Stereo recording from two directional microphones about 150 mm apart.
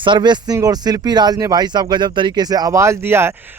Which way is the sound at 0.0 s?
30° right (ahead or behind).